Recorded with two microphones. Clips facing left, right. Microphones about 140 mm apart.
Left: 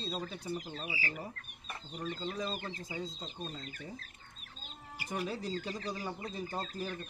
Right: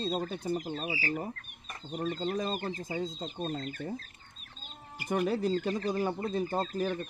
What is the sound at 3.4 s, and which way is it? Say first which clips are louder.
Speech: right 9 dB; 60° right (ahead or behind).